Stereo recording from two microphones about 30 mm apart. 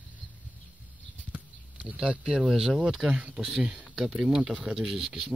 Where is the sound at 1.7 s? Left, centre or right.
Right.